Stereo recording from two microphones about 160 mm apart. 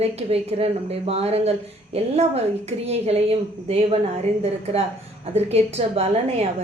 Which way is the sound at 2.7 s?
40° right (ahead or behind).